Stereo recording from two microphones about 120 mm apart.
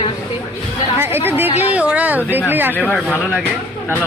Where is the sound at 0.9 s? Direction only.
20° right (ahead or behind).